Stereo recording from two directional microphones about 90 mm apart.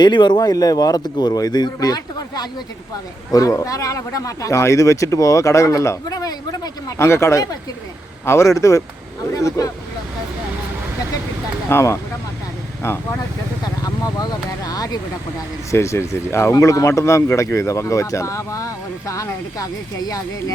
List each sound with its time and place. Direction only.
0.0 s speech: 60° left (ahead or behind)
7.0 s speech: 30° left (ahead or behind)
11.7 s speech: 30° left (ahead or behind)
13.8 s speech: 45° left (ahead or behind)
15.7 s speech: 30° left (ahead or behind)